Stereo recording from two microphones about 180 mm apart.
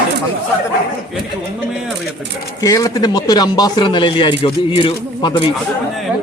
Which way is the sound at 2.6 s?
20° left (ahead or behind).